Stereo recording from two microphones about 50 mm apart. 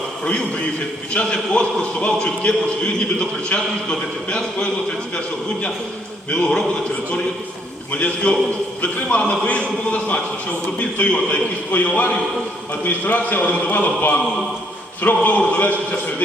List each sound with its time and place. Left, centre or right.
1.1 s a man's voice: centre
6.3 s a man's voice: left
7.9 s a man's voice: left
11.7 s a man's voice: left